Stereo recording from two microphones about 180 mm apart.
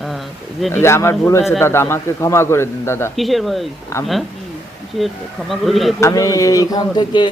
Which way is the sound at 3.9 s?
15° left (ahead or behind).